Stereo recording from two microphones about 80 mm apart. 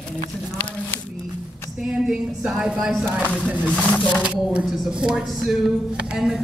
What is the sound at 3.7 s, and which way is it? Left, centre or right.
Speech, centre.